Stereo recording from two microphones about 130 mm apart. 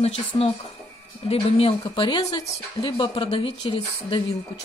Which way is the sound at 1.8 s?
35° left (ahead or behind).